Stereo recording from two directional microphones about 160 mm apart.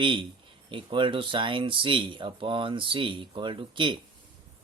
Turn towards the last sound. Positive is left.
turn(degrees=-30)  # may be behind; listen again after turning